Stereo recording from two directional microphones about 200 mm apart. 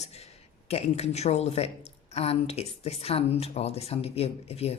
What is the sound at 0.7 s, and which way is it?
A woman's voice, 30° left (ahead or behind).